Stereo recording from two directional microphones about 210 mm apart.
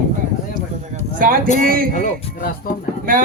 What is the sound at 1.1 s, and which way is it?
Speech, 40° right (ahead or behind).